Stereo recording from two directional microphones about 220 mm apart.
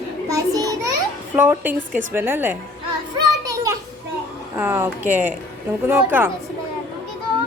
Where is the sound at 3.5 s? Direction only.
15° right (ahead or behind).